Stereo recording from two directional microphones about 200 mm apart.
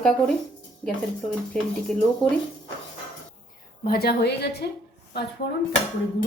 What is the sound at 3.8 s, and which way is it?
Speech, 50° left (ahead or behind).